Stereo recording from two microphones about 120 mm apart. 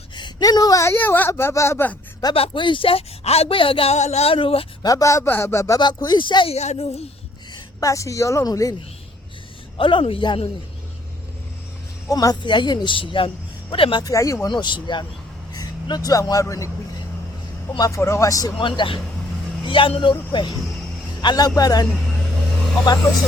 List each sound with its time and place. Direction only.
0.2 s speech: 35° left (ahead or behind); by 2.0 s 20° left (ahead or behind)
2.3 s a woman's voice: 50° left (ahead or behind)
3.9 s speech: 70° left (ahead or behind); by 4.6 s 50° left (ahead or behind)
4.8 s speech: 30° left (ahead or behind)
5.8 s speech: 40° left (ahead or behind)
6.5 s speech: 60° left (ahead or behind)
7.5 s a woman's voice: 25° left (ahead or behind)
9.7 s a woman's voice: 45° left (ahead or behind)
12.0 s speech: 30° left (ahead or behind)
14.0 s speech: 25° left (ahead or behind)
14.4 s a man's voice: 40° left (ahead or behind)
17.7 s speech: 25° left (ahead or behind)
18.6 s a woman's voice: 45° left (ahead or behind)